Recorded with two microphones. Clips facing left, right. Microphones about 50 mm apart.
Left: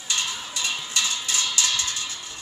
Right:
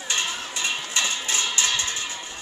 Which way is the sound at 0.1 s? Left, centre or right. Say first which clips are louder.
Right 1 dB; right.